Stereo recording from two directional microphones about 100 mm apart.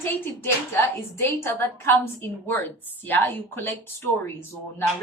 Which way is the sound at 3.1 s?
20° left (ahead or behind).